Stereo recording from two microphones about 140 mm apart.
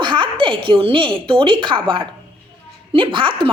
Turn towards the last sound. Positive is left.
turn(degrees=-35)  # may be behind; listen again after turning